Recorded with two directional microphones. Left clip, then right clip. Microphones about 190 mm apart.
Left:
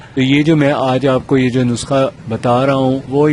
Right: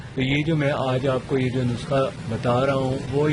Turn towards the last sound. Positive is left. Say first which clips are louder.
# left 10 dB
turn(degrees=40)  # may be behind; listen again after turning